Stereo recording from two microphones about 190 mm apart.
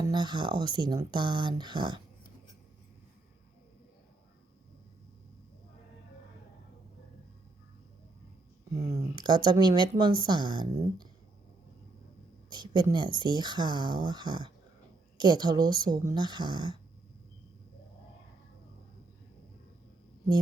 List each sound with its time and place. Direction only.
0.0 s speech: 25° right (ahead or behind)
8.9 s speech: 20° right (ahead or behind)
12.5 s speech: 25° right (ahead or behind)